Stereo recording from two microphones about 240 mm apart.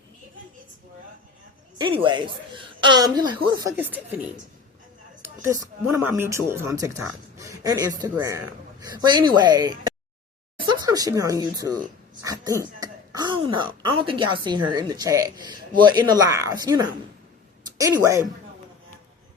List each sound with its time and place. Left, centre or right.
1.8 s a woman's voice: right
5.2 s speech: centre